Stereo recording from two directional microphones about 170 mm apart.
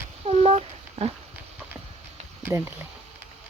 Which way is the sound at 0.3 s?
35° right (ahead or behind).